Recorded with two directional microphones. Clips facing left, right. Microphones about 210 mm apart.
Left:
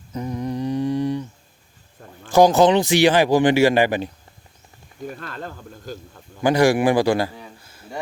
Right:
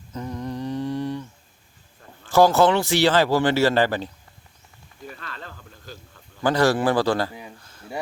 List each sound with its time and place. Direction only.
0.1 s humming: 10° left (ahead or behind)
2.2 s speech: 15° left (ahead or behind)
5.0 s speech: 45° left (ahead or behind)
6.4 s speech: 15° left (ahead or behind)
7.6 s a sound: 10° left (ahead or behind)